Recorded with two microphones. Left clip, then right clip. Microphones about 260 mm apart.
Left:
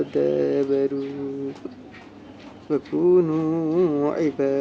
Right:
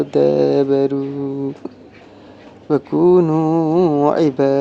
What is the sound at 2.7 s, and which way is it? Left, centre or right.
Speech, right.